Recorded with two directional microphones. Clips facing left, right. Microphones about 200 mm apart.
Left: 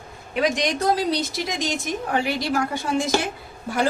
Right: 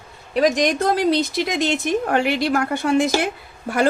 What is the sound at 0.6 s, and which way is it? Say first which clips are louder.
A woman's voice: right 3 dB; 50° right (ahead or behind).